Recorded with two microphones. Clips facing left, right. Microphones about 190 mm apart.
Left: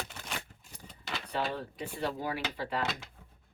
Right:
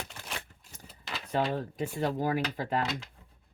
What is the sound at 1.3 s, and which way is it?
Speech, 45° right (ahead or behind).